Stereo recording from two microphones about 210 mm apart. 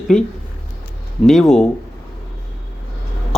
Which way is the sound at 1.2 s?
Centre (ahead or behind).